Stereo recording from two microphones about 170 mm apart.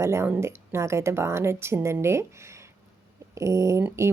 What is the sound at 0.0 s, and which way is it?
Speech, 15° right (ahead or behind).